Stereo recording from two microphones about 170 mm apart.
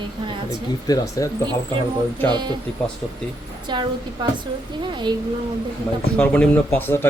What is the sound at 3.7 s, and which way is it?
Speech, 25° right (ahead or behind).